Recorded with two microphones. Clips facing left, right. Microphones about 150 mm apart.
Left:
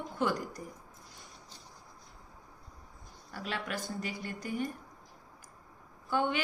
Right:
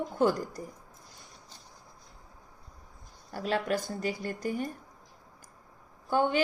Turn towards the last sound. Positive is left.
turn(degrees=-40)  # may be behind; listen again after turning